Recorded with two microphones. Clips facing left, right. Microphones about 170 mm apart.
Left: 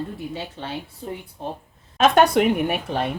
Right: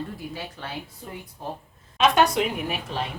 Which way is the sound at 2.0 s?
55° left (ahead or behind).